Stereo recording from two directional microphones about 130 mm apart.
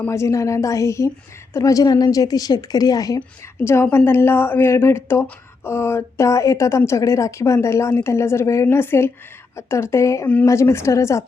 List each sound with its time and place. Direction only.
0.1 s a woman's voice: 20° left (ahead or behind)